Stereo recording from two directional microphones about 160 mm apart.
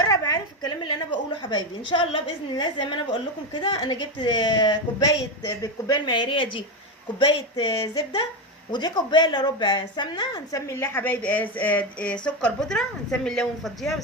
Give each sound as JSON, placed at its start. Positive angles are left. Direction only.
{"t": 0.0, "sound": "a woman's voice", "side_deg": 20}